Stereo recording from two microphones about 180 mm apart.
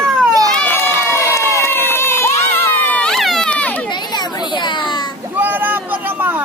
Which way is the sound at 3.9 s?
25° left (ahead or behind).